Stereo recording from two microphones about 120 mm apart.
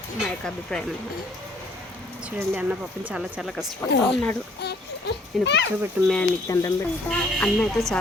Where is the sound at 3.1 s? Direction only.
5° right (ahead or behind).